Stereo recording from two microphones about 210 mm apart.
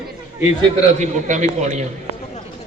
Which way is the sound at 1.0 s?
35° right (ahead or behind).